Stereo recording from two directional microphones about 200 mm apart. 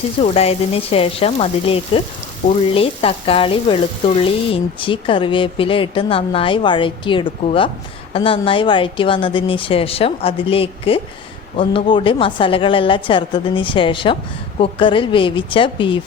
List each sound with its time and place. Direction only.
0.2 s a woman's voice: 30° left (ahead or behind)